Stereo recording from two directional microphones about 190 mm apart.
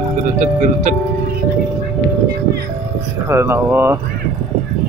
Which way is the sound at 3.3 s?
15° right (ahead or behind).